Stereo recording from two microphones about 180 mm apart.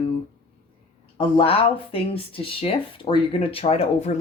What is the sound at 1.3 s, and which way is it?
Speech, 30° left (ahead or behind).